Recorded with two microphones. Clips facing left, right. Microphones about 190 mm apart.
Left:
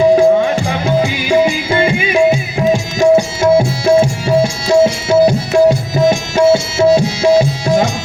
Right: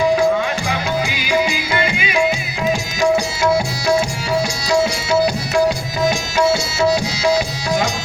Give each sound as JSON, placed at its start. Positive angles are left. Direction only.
{"t": 0.0, "sound": "music", "side_deg": 25}